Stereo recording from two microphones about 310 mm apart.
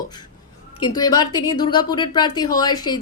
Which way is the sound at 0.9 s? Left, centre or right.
Centre.